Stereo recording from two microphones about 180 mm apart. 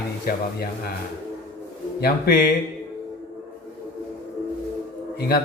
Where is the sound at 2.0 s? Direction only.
60° left (ahead or behind).